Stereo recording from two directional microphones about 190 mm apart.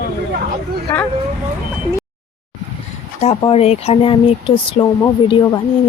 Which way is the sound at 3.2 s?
30° left (ahead or behind).